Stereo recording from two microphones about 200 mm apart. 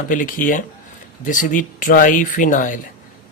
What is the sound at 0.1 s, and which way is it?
Speech, 40° left (ahead or behind).